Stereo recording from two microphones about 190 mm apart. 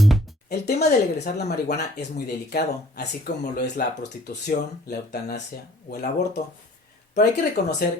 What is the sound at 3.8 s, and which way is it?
Speech, 55° left (ahead or behind).